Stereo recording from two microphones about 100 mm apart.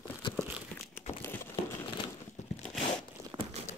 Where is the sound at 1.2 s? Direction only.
25° left (ahead or behind).